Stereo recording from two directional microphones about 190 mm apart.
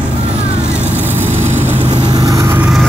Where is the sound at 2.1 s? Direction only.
20° right (ahead or behind).